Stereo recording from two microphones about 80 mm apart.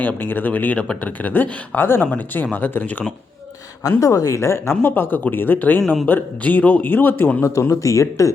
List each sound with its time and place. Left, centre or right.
0.0 s speech: left
3.8 s speech: left
7.4 s speech: left